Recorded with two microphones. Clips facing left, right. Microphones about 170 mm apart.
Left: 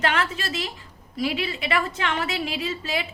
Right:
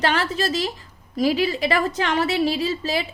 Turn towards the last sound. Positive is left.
turn(degrees=-35)  # may be behind; listen again after turning